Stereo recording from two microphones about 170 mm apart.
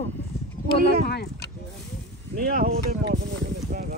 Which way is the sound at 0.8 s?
70° left (ahead or behind).